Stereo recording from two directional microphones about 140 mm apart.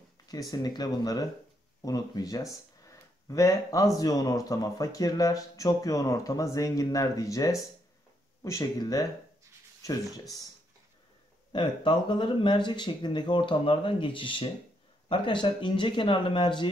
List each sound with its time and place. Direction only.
0.3 s speech: 30° left (ahead or behind)
11.5 s speech: 35° left (ahead or behind)